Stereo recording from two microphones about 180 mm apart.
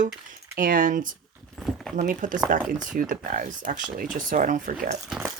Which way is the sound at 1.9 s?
45° right (ahead or behind).